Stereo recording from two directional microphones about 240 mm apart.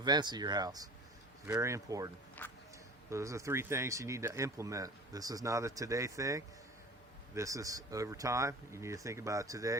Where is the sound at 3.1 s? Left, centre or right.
Centre.